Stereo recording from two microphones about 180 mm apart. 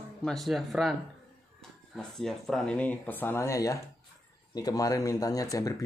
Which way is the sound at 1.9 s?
Centre (ahead or behind).